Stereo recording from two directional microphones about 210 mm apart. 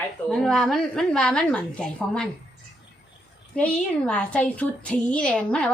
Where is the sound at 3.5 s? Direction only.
5° left (ahead or behind).